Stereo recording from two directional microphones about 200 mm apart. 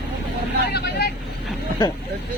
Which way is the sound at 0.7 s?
55° left (ahead or behind).